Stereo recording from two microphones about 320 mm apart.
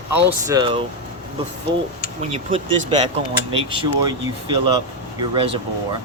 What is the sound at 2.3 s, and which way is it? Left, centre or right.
Speech, centre.